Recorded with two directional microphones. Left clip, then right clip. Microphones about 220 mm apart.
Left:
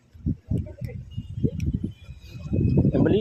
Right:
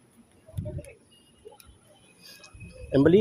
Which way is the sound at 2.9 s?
15° right (ahead or behind).